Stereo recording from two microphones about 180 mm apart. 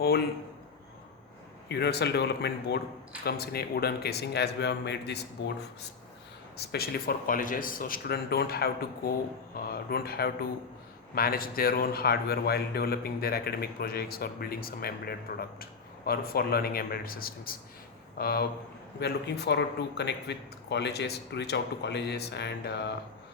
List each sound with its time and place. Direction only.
1.6 s a man's voice: 65° left (ahead or behind)
6.6 s a man's voice: 60° left (ahead or behind)